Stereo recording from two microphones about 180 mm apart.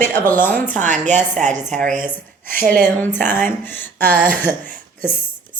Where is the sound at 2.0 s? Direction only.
10° left (ahead or behind).